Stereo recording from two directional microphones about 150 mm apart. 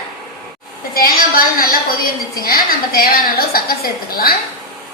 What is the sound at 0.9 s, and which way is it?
A woman's voice, 75° left (ahead or behind).